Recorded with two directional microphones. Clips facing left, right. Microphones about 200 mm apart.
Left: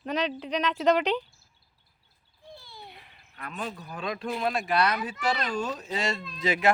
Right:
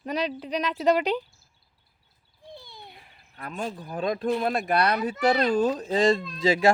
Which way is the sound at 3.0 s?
35° right (ahead or behind).